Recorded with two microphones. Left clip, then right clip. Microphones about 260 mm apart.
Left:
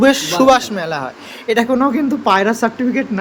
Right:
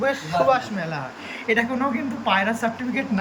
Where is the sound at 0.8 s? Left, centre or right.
Left.